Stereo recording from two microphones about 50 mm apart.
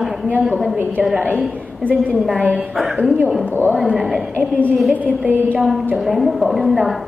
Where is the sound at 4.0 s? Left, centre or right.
Centre.